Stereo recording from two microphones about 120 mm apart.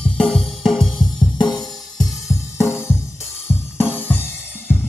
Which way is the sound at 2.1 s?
25° left (ahead or behind).